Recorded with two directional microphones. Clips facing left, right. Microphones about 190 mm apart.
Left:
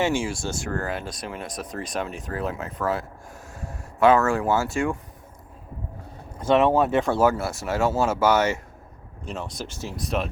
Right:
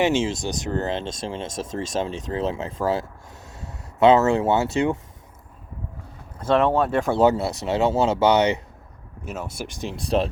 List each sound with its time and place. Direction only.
0.0 s speech: 20° right (ahead or behind)
4.0 s speech: 20° right (ahead or behind)
6.5 s speech: 5° left (ahead or behind)
7.1 s speech: 20° right (ahead or behind)
9.2 s speech: 5° right (ahead or behind)
10.0 s speech: 30° right (ahead or behind)